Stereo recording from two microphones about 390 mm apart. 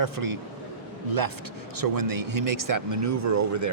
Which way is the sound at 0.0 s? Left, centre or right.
Right.